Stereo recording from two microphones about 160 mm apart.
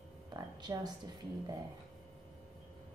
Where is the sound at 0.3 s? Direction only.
25° right (ahead or behind).